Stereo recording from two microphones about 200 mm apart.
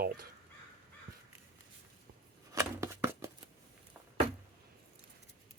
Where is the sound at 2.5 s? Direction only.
15° right (ahead or behind).